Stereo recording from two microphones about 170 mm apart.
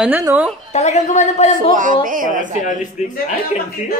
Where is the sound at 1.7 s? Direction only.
50° right (ahead or behind).